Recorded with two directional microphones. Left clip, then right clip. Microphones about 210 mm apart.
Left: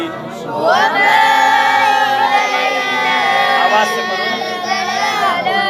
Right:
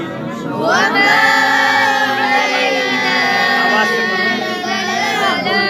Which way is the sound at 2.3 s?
15° left (ahead or behind).